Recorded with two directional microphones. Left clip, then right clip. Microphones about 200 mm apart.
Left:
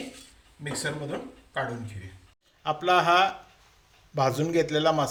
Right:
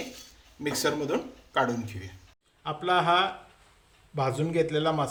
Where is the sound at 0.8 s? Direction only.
55° right (ahead or behind).